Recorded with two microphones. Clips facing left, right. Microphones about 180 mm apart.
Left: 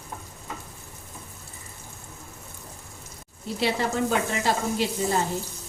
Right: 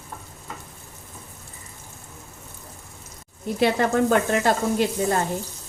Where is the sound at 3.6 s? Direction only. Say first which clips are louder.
Right 5 dB; 55° right (ahead or behind).